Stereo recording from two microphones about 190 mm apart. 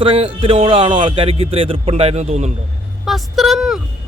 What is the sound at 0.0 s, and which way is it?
A man's voice, 30° right (ahead or behind).